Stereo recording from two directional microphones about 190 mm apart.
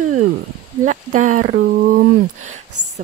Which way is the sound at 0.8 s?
40° right (ahead or behind).